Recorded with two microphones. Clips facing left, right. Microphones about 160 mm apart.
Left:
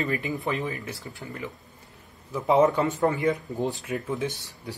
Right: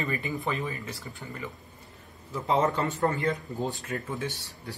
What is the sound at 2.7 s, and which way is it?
Speech, 15° left (ahead or behind).